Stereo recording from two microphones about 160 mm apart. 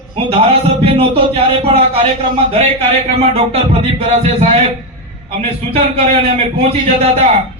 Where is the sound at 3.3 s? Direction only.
40° right (ahead or behind).